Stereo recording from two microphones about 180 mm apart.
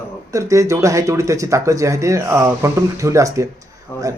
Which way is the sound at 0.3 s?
15° right (ahead or behind).